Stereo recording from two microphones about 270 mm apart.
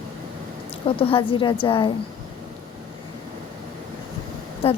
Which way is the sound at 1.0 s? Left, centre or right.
Centre.